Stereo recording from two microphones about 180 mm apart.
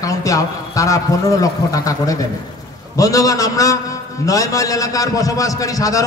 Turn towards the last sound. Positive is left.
turn(degrees=20)  # may be behind; listen again after turning